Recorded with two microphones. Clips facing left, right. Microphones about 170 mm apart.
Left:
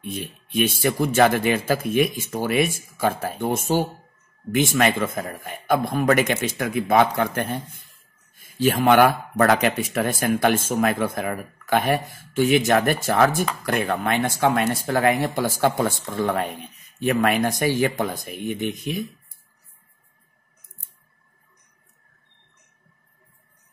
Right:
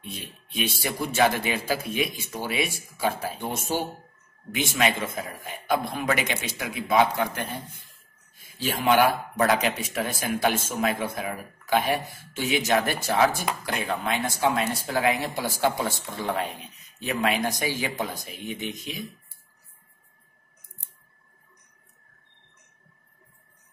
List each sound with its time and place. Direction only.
0.0 s speech: 50° left (ahead or behind)